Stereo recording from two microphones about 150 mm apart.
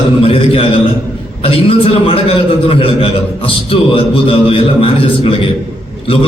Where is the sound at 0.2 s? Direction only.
40° left (ahead or behind).